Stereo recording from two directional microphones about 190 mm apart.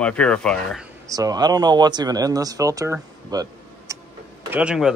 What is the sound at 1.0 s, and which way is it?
Speech, 20° right (ahead or behind).